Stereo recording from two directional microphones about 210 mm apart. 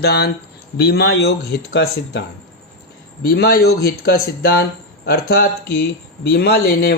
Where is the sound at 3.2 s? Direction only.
45° left (ahead or behind).